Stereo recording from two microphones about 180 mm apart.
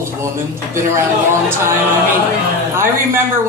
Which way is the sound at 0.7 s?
15° right (ahead or behind).